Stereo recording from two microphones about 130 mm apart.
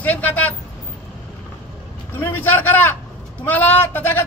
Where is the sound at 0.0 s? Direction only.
10° left (ahead or behind).